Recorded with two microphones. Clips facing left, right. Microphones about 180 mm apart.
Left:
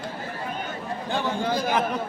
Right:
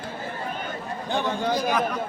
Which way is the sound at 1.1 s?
15° right (ahead or behind).